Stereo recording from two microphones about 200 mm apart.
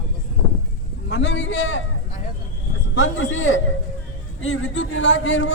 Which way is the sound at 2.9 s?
70° left (ahead or behind).